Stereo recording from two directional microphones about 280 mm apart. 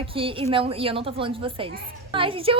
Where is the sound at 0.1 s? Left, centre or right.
Centre.